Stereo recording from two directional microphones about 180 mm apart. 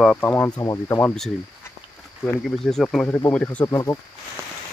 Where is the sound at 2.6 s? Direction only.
5° left (ahead or behind).